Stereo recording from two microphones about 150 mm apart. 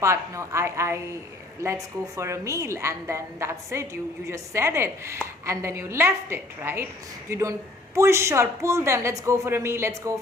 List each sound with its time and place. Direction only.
0.0 s a woman's voice: 20° right (ahead or behind)